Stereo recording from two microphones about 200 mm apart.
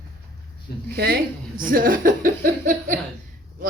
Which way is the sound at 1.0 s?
50° right (ahead or behind).